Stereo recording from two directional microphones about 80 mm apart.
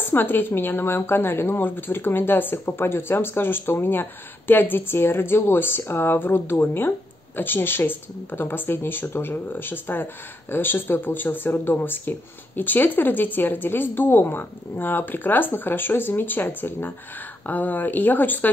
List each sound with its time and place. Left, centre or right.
0.0 s speech: left